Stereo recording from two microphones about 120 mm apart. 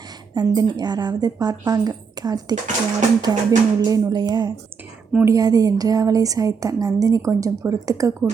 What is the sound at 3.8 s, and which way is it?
A woman's voice, 30° right (ahead or behind).